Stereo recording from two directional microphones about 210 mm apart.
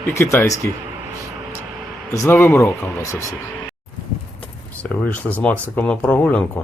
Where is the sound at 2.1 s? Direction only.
10° left (ahead or behind).